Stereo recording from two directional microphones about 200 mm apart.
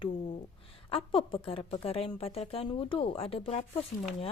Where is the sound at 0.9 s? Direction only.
25° left (ahead or behind).